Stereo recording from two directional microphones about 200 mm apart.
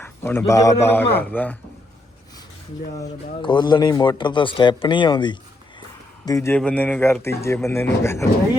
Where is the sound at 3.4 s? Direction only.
20° left (ahead or behind).